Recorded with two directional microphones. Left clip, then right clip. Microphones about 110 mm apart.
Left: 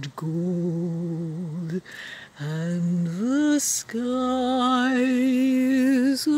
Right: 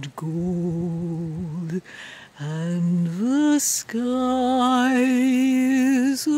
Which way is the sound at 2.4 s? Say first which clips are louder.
Right 1 dB; 15° right (ahead or behind).